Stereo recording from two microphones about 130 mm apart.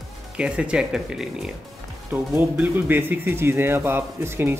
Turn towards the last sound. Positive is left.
turn(degrees=-15)  # may be behind; listen again after turning